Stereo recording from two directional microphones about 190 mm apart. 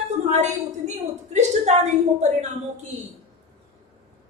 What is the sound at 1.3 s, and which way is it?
Speech, 35° right (ahead or behind).